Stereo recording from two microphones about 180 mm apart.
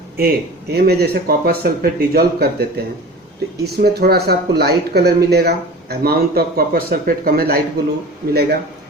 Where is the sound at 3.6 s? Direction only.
60° right (ahead or behind).